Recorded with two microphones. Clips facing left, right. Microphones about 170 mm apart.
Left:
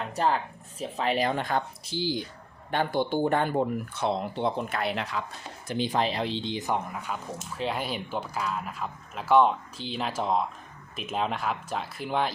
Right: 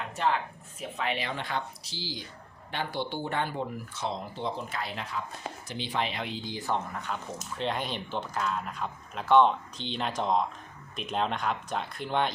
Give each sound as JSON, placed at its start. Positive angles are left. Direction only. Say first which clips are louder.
{"t": 0.8, "sound": "speech", "louder": "left 6 dB", "side_deg": 35}
{"t": 5.6, "sound": "speech", "louder": "left 6 dB", "side_deg": 45}